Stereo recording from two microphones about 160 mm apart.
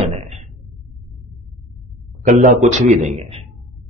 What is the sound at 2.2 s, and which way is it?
A man's voice, 50° right (ahead or behind).